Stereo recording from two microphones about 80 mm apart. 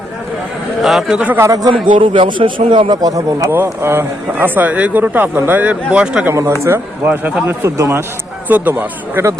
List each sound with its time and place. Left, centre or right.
0.8 s a man's voice: centre
1.5 s speech: right
1.9 s a man's voice: right
3.0 s speech: right
3.5 s a man's voice: right
8.4 s speech: right